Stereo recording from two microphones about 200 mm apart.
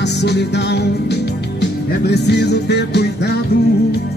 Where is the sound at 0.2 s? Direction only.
55° left (ahead or behind).